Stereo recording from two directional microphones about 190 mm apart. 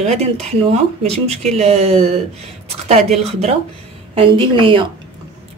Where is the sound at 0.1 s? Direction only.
35° right (ahead or behind).